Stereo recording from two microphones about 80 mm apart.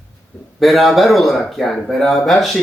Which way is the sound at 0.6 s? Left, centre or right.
Centre.